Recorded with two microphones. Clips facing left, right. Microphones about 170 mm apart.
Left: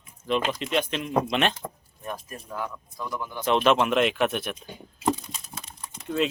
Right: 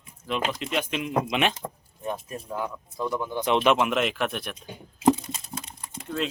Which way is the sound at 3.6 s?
10° right (ahead or behind).